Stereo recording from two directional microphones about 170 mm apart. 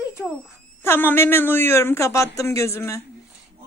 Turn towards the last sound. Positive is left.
turn(degrees=15)  # may be behind; listen again after turning